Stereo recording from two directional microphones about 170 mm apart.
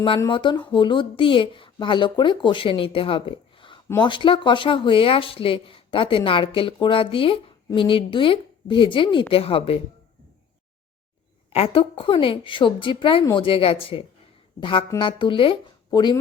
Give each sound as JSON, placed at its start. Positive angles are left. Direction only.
{"t": 0.3, "sound": "speech", "side_deg": 30}
{"t": 11.5, "sound": "speech", "side_deg": 35}